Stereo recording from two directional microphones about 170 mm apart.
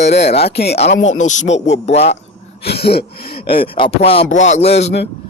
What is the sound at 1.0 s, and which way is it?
Speech, 45° left (ahead or behind).